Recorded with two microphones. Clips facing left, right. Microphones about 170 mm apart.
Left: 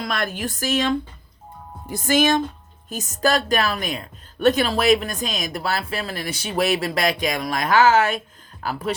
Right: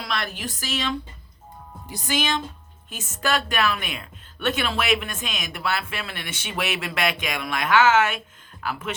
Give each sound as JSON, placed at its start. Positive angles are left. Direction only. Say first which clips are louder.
{"t": 0.0, "sound": "a woman's voice", "louder": "left 4 dB", "side_deg": 45}